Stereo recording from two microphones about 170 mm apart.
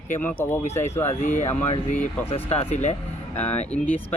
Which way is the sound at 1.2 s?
45° left (ahead or behind).